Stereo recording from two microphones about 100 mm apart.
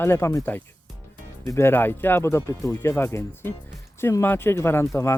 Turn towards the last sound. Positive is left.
turn(degrees=25)  # may be behind; listen again after turning